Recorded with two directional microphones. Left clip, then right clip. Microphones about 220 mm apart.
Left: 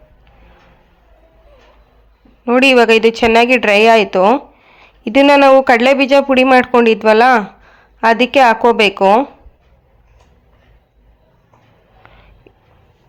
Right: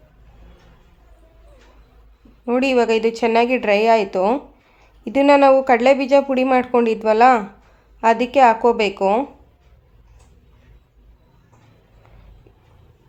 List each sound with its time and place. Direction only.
2.4 s speech: 15° left (ahead or behind)